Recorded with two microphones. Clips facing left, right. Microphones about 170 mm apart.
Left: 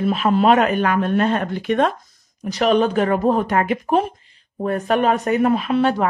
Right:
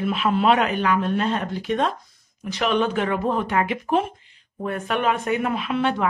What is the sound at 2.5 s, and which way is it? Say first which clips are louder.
Speech: left 5 dB; 40° left (ahead or behind).